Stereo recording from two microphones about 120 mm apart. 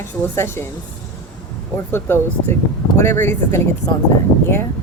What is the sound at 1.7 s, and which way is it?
Speech, 20° left (ahead or behind).